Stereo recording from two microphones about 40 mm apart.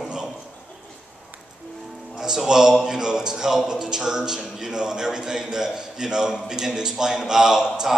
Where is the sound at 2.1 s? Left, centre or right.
Centre.